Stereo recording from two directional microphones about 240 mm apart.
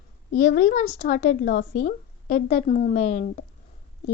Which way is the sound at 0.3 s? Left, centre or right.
Left.